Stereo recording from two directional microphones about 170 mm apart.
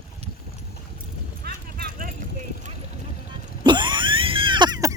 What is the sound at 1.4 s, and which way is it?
Clip-clop, 65° right (ahead or behind).